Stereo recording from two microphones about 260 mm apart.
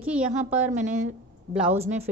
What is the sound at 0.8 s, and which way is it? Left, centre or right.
Speech, right.